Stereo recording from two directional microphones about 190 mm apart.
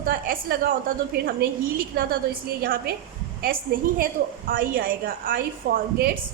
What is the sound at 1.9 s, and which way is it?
A woman's voice, 55° right (ahead or behind).